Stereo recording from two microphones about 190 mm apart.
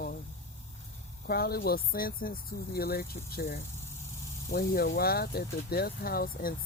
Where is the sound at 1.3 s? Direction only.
55° left (ahead or behind).